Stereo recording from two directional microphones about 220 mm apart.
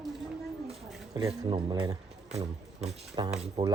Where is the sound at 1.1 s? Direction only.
15° right (ahead or behind).